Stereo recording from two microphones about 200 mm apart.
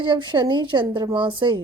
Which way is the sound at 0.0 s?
25° right (ahead or behind).